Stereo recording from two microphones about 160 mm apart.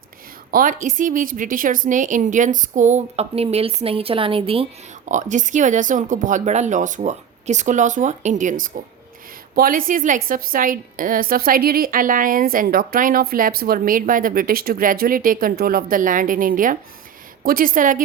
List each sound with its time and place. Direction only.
0.5 s a woman's voice: 55° right (ahead or behind); by 5.1 s 35° right (ahead or behind)
5.1 s a woman's voice: 50° right (ahead or behind)